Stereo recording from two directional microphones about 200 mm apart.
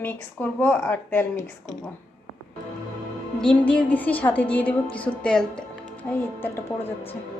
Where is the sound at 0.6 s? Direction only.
10° left (ahead or behind).